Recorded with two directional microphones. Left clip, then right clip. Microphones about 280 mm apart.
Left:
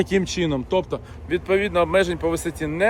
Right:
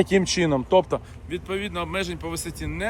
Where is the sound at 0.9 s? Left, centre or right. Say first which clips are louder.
Left 2 dB; centre.